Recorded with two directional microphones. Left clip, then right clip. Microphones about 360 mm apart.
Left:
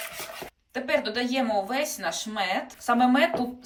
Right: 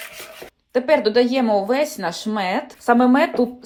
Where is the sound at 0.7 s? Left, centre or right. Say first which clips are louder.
Right 11 dB; centre.